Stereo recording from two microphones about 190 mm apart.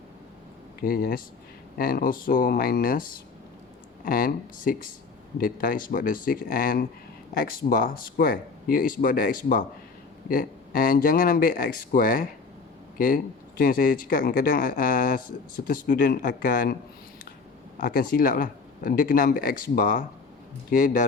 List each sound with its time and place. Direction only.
0.8 s speech: 50° left (ahead or behind)
17.7 s speech: 45° left (ahead or behind)